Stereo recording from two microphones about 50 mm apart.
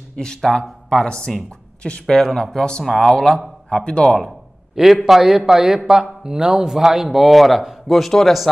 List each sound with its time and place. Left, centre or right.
0.1 s speech: centre
2.1 s speech: centre
2.8 s speech: centre
3.7 s speech: centre
4.8 s a man's voice: centre